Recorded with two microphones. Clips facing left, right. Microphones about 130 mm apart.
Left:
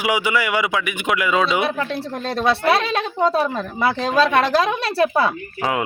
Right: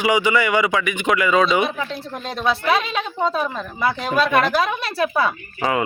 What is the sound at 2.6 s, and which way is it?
Speech, 80° left.